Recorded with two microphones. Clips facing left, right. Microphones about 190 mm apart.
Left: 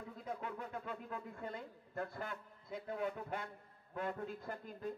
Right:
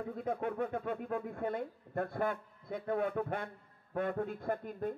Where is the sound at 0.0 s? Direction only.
55° right (ahead or behind).